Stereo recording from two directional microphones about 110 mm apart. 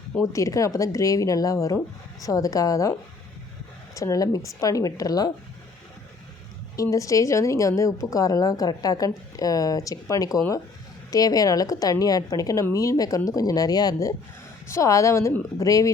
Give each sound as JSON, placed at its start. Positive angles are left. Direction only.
{"t": 0.3, "sound": "a woman's voice", "side_deg": 30}
{"t": 3.9, "sound": "a woman's voice", "side_deg": 30}
{"t": 6.9, "sound": "a woman's voice", "side_deg": 30}